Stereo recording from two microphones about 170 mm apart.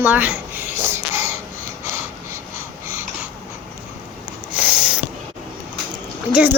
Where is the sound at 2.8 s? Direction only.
15° right (ahead or behind).